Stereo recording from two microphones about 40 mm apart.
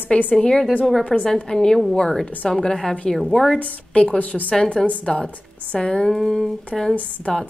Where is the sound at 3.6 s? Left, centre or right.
Left.